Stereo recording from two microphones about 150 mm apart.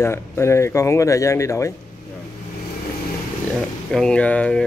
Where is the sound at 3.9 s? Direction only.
5° left (ahead or behind).